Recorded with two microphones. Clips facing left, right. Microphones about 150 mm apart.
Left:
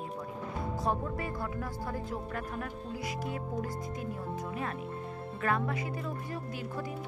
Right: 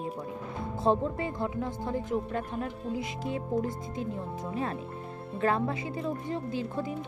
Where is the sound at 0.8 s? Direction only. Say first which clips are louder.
Right 8 dB; 25° right (ahead or behind).